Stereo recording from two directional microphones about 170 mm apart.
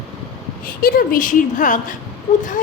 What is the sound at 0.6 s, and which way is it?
A woman's voice, 55° left (ahead or behind).